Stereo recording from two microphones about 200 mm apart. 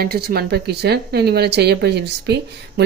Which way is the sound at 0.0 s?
50° right (ahead or behind).